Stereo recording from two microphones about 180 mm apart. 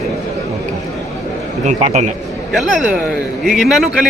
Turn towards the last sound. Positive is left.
turn(degrees=0)  # may be behind; listen again after turning